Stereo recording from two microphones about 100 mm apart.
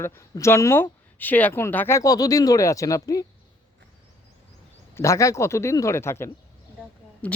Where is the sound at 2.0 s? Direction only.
35° left (ahead or behind).